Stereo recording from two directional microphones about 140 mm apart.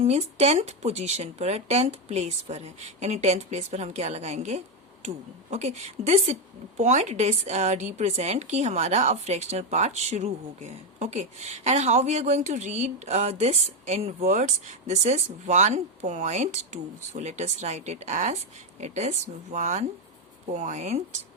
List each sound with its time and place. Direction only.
0.0 s a woman's voice: 50° right (ahead or behind)